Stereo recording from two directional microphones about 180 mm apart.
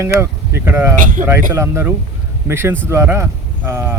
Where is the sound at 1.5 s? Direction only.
15° right (ahead or behind).